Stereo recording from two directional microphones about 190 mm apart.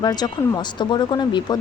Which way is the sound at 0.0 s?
20° left (ahead or behind).